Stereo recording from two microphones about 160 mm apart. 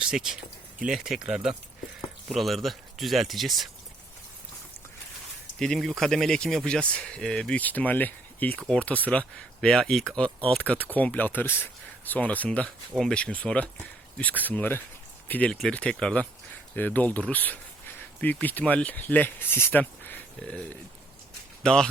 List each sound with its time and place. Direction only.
0.0 s speech: 5° right (ahead or behind)
5.5 s speech: 5° left (ahead or behind)